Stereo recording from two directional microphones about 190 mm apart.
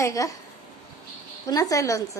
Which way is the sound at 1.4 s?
20° left (ahead or behind).